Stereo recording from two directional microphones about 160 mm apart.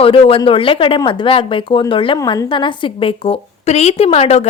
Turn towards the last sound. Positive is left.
turn(degrees=40)  # may be behind; listen again after turning